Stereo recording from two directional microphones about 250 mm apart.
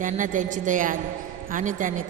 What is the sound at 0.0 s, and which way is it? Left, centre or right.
A woman's voice, right.